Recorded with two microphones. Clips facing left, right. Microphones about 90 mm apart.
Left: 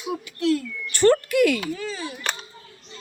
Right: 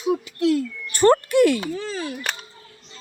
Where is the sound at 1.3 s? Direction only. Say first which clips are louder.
Right 3 dB; 35° right (ahead or behind).